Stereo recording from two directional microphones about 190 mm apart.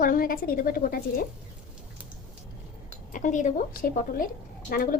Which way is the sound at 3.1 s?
40° left (ahead or behind).